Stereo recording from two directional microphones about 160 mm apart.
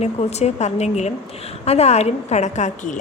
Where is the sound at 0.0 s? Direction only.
45° left (ahead or behind).